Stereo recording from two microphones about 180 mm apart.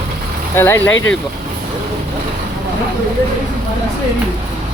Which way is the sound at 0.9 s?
90° left.